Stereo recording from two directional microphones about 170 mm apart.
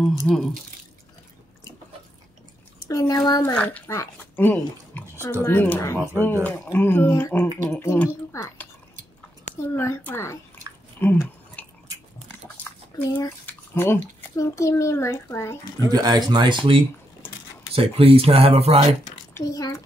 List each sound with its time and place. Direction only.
0.3 s a child's voice: 5° left (ahead or behind)
2.8 s speech: 20° left (ahead or behind)
3.5 s a child's voice: 10° left (ahead or behind)
11.0 s a sound: 10° left (ahead or behind)
12.9 s speech: 25° left (ahead or behind)
13.5 s drip: 15° left (ahead or behind)
14.3 s a child's voice: 15° left (ahead or behind)
15.9 s speech: 25° right (ahead or behind)
17.7 s speech: 35° right (ahead or behind)
19.3 s speech: 20° left (ahead or behind)